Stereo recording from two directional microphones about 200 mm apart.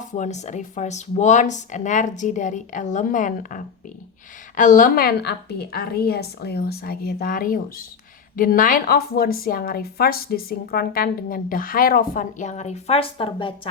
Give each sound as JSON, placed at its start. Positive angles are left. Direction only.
{"t": 0.0, "sound": "speech", "side_deg": 35}